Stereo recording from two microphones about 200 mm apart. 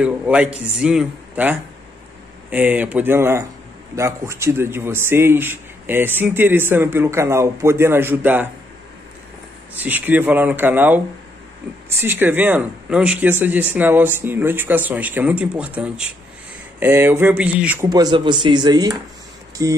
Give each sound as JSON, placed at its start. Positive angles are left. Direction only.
{"t": 0.0, "sound": "a man's voice", "side_deg": -5}
{"t": 9.8, "sound": "a man's voice", "side_deg": -10}
{"t": 12.0, "sound": "a man's voice", "side_deg": -10}
{"t": 17.8, "sound": "a man's voice", "side_deg": -20}